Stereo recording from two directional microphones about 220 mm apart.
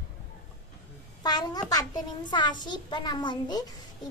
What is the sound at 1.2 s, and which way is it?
A child's voice, 20° left (ahead or behind).